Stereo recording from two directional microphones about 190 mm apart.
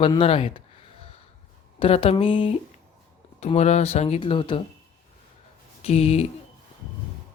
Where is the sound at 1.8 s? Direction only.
30° left (ahead or behind).